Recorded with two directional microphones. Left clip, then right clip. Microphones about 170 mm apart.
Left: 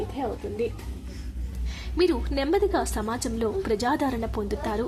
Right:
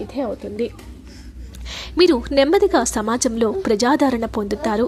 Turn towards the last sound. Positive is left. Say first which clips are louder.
# right 7 dB
turn(degrees=-40)  # may be behind; listen again after turning